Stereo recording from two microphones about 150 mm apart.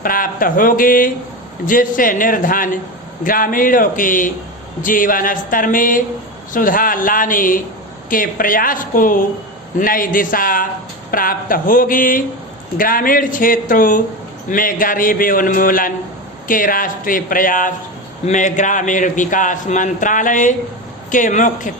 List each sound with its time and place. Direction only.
0.0 s a man's voice: 70° left (ahead or behind)